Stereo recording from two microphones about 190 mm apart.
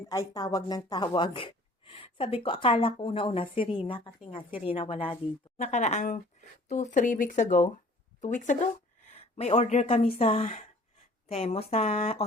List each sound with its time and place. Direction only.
0.1 s speech: 20° left (ahead or behind)